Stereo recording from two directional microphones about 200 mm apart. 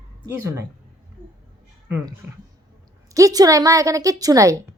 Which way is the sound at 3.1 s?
15° right (ahead or behind).